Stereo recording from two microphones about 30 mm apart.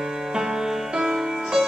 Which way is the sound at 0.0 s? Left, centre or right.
Centre.